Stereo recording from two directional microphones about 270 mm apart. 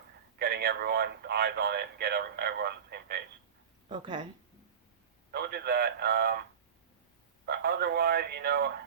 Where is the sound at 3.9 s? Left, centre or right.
Centre.